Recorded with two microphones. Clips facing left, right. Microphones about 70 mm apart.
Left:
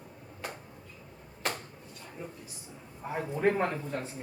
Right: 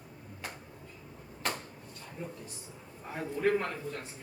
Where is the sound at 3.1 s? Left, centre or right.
Left.